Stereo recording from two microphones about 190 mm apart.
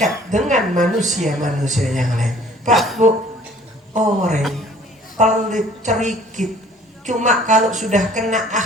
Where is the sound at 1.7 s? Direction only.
Centre (ahead or behind).